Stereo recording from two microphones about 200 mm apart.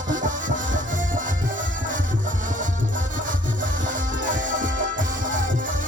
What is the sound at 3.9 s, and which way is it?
Music, 40° right (ahead or behind).